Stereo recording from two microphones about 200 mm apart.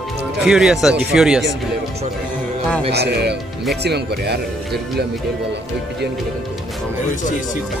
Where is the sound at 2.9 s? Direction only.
55° right (ahead or behind).